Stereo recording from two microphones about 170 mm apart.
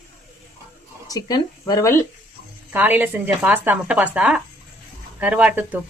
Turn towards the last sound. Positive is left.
turn(degrees=-10)  # may be behind; listen again after turning